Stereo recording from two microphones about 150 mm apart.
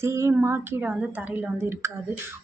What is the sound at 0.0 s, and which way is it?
Speech, 20° right (ahead or behind).